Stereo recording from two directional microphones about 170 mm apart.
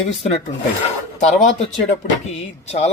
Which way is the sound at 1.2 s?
40° left (ahead or behind).